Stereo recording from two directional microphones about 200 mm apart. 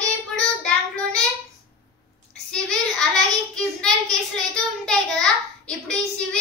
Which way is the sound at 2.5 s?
5° left (ahead or behind).